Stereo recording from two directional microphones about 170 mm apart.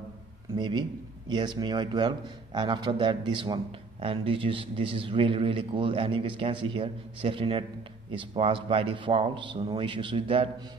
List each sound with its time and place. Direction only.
0.6 s a man's voice: 25° right (ahead or behind)